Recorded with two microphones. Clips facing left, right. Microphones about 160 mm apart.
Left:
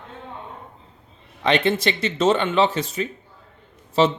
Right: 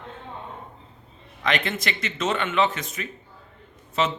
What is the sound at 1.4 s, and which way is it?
Speech, 30° left (ahead or behind).